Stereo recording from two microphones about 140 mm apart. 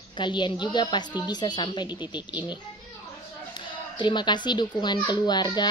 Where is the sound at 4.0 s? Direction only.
35° left (ahead or behind).